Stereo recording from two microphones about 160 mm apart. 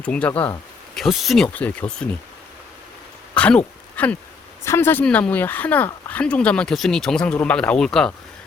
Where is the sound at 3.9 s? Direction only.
10° left (ahead or behind).